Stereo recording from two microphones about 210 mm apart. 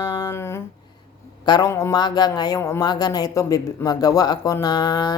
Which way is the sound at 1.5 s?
15° left (ahead or behind).